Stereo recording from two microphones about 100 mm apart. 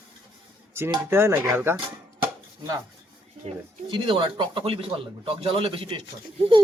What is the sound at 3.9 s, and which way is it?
Speech, 60° right (ahead or behind).